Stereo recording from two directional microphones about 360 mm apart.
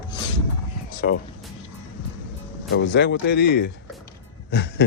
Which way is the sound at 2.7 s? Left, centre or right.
Left.